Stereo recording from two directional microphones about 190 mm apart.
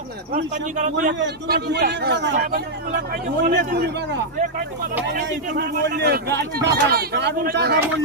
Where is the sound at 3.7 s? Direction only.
60° right (ahead or behind).